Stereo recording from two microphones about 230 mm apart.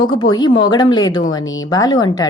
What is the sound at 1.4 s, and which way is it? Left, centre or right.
Speech, left.